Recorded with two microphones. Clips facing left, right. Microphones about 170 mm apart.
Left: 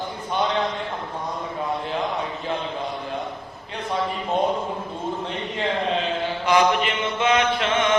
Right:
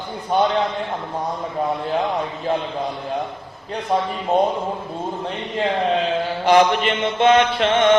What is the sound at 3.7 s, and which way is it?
Chant, 35° right (ahead or behind).